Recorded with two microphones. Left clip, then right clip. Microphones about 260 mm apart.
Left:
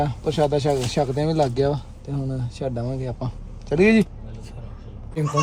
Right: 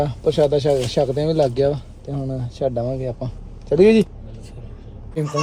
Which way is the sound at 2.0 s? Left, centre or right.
Centre.